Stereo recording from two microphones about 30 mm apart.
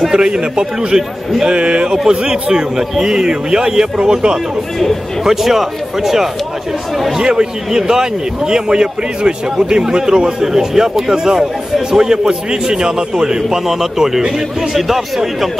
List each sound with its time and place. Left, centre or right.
0.1 s a man's voice: right
5.2 s speech: centre
7.3 s a man's voice: right
13.7 s speech: centre